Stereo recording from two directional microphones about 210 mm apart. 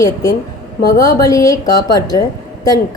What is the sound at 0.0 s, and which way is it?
A woman's voice, 15° left (ahead or behind).